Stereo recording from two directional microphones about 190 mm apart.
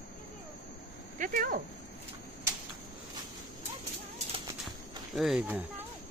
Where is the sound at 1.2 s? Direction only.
45° right (ahead or behind).